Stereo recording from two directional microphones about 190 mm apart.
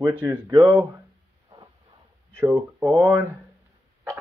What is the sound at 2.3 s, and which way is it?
Speech, 10° right (ahead or behind).